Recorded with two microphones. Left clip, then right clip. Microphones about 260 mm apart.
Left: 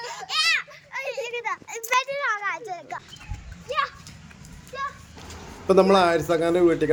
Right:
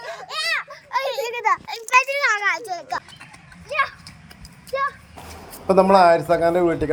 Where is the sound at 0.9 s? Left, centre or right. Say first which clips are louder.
Right 6 dB; right.